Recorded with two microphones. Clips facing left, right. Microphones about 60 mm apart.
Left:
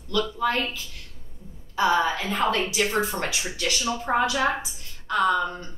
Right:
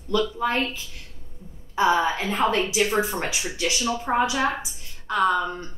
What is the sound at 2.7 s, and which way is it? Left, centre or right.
Speech, centre.